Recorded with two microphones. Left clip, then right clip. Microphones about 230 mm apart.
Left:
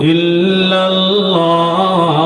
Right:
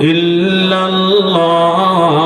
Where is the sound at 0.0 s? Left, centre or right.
Right.